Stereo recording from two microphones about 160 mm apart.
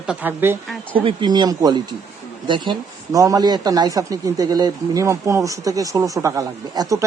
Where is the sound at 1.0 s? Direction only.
30° right (ahead or behind).